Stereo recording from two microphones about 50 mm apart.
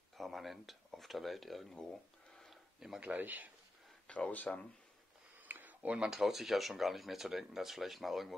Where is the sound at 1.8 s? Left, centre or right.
Centre.